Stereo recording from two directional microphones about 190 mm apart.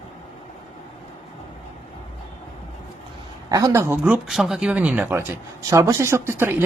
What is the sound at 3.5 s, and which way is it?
Speech, 20° right (ahead or behind).